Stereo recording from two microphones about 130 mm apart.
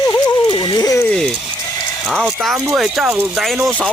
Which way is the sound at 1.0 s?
5° left (ahead or behind).